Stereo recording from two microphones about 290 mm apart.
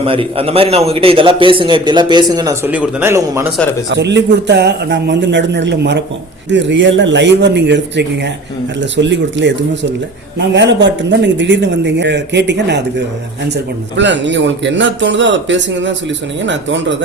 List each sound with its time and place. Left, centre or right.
0.0 s a man's voice: centre
3.8 s a man's voice: right